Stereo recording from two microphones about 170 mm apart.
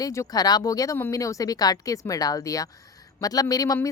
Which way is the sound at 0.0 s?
20° left (ahead or behind).